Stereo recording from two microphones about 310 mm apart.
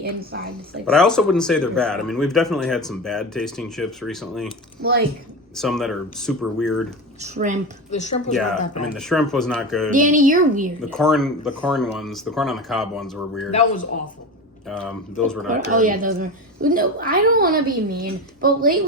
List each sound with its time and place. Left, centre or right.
0.0 s a woman's voice: right
0.9 s speech: centre
4.8 s a woman's voice: right
5.5 s speech: centre
7.3 s a woman's voice: right
7.9 s a woman's voice: left
8.3 s speech: centre
9.9 s a woman's voice: right
10.8 s speech: centre
14.7 s speech: centre
15.7 s a woman's voice: right